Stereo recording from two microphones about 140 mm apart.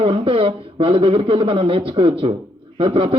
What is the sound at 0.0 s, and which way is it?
A man's voice, 40° right (ahead or behind).